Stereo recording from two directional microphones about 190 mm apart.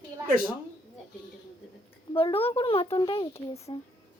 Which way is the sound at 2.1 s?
30° left (ahead or behind).